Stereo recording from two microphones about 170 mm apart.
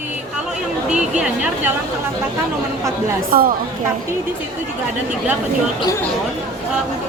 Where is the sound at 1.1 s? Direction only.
5° right (ahead or behind).